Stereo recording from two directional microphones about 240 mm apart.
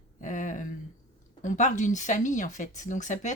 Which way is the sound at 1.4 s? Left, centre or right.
Left.